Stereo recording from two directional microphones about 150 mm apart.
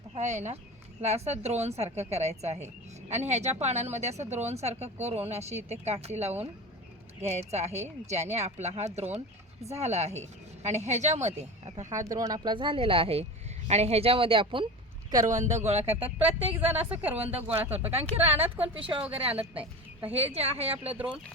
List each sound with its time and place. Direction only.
0.2 s speech: 50° right (ahead or behind)
11.9 s speech: 20° right (ahead or behind)
15.3 s speech: 50° right (ahead or behind)
16.9 s speech: 10° right (ahead or behind)
17.2 s speech: 40° right (ahead or behind)
20.1 s speech: 40° right (ahead or behind)